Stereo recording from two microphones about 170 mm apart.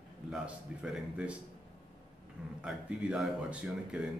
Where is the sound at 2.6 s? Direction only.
5° right (ahead or behind).